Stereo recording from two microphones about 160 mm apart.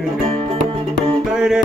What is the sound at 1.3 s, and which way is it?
Music, 5° right (ahead or behind).